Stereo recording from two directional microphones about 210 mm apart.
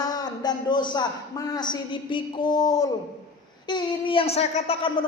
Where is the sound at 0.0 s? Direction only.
20° left (ahead or behind).